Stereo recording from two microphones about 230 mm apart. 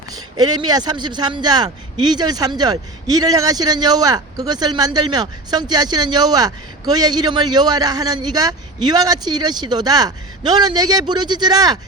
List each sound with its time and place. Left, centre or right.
0.3 s speech: centre